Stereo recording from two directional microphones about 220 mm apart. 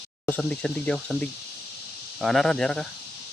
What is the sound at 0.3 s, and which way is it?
Speech, 5° left (ahead or behind).